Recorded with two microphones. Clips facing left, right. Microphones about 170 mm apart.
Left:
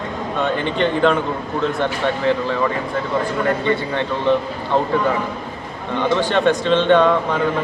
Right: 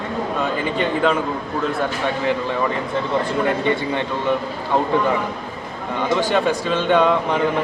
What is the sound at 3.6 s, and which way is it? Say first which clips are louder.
Speech: even; 15° right (ahead or behind).